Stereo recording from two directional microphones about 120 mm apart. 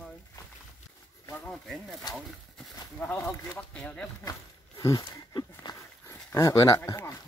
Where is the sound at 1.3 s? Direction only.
10° left (ahead or behind).